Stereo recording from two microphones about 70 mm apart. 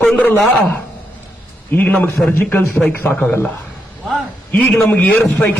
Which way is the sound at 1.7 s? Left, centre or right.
Left.